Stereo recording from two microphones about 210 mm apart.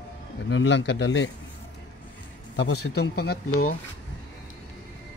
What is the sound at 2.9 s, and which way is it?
Speech, 50° left (ahead or behind).